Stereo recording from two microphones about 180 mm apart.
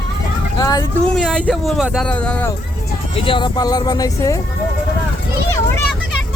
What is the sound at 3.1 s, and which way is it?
Speech, 30° left (ahead or behind).